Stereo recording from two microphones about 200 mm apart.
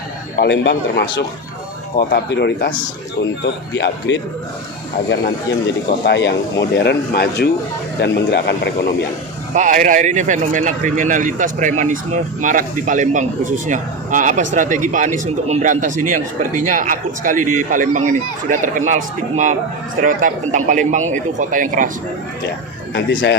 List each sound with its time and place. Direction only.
0.3 s speech: 60° left (ahead or behind)
6.1 s speech: 60° left (ahead or behind)
9.6 s speech: 40° right (ahead or behind)
20.0 s speech: 40° right (ahead or behind)
23.0 s speech: 60° left (ahead or behind)